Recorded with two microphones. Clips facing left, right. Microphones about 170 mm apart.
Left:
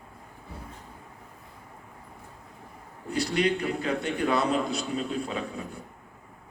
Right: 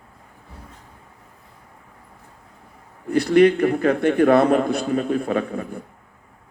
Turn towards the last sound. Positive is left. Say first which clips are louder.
# right 10 dB
turn(degrees=-55)  # may be behind; listen again after turning